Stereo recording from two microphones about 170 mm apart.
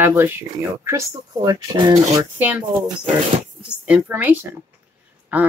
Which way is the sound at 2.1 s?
10° right (ahead or behind).